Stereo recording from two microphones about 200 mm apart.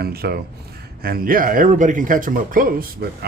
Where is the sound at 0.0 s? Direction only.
50° right (ahead or behind).